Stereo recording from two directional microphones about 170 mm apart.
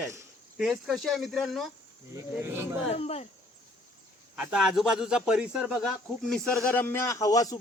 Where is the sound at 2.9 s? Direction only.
35° left (ahead or behind).